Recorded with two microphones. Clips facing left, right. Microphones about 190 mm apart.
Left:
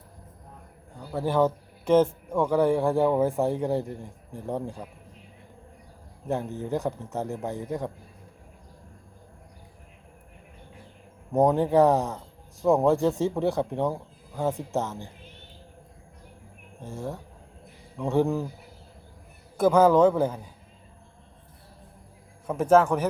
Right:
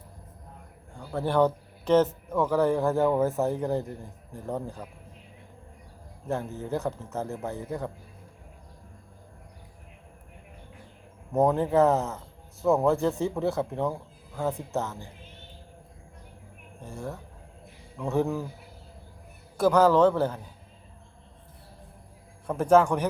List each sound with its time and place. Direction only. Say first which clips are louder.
1.1 s a man's voice: even; 5° left (ahead or behind)
6.2 s a man's voice: left 2 dB; 15° left (ahead or behind)
11.3 s a man's voice: left 2 dB; 15° left (ahead or behind)
16.8 s a man's voice: left 2 dB; 15° left (ahead or behind)
19.7 s a man's voice: left 2 dB; 10° left (ahead or behind)
22.4 s a man's voice: left 1 dB; 5° left (ahead or behind)